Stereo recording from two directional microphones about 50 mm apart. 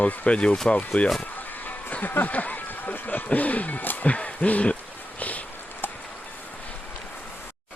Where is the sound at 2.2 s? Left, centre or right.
Left.